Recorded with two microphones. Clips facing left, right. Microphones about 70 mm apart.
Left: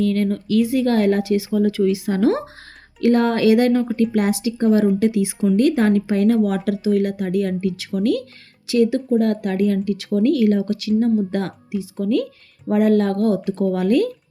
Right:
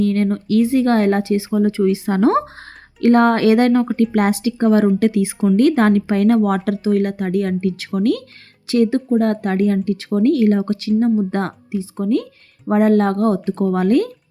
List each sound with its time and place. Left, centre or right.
0.0 s speech: right